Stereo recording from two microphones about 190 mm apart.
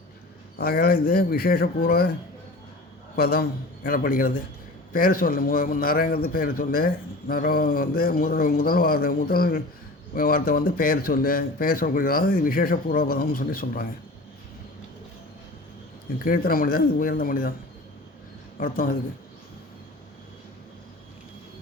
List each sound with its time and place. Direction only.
0.6 s a man's voice: 50° left (ahead or behind)
3.2 s a man's voice: 50° left (ahead or behind)
16.1 s a man's voice: 50° left (ahead or behind)
18.5 s a man's voice: 50° left (ahead or behind)